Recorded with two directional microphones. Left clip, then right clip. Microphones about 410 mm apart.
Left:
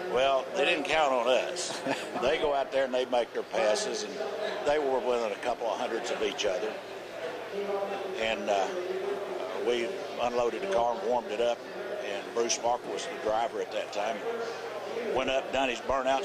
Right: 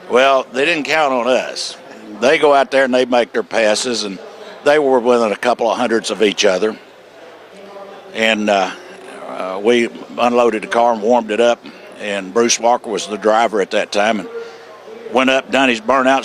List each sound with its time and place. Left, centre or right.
0.1 s speech: right
8.1 s speech: right